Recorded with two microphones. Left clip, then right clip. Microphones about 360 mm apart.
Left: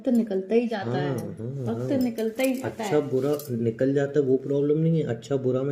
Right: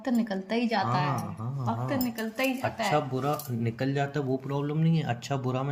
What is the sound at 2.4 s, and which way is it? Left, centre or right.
Speech, right.